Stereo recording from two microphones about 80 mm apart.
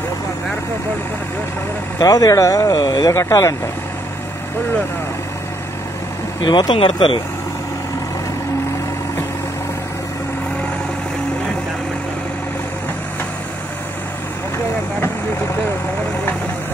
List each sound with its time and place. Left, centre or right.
2.0 s speech: left
3.1 s speech: left
6.4 s speech: left